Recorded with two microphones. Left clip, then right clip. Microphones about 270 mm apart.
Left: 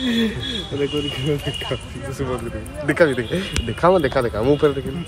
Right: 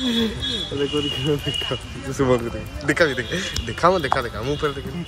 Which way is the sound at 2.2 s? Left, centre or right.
Right.